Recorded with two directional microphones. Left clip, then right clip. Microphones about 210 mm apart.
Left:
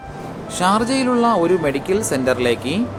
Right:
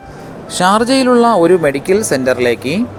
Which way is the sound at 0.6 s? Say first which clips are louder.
Right 6 dB; 35° right (ahead or behind).